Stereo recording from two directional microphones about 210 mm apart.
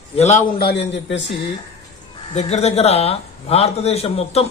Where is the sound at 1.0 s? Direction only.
60° left (ahead or behind).